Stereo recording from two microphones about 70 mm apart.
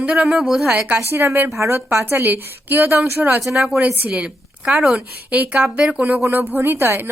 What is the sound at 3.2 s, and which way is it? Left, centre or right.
A woman's voice, centre.